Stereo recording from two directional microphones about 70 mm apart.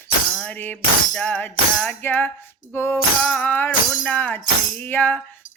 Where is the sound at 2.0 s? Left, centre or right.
Left.